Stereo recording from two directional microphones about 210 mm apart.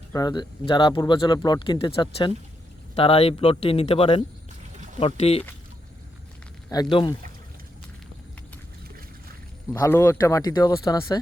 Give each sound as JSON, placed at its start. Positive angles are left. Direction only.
{"t": 0.1, "sound": "speech", "side_deg": 20}
{"t": 6.7, "sound": "speech", "side_deg": 20}
{"t": 9.7, "sound": "speech", "side_deg": 15}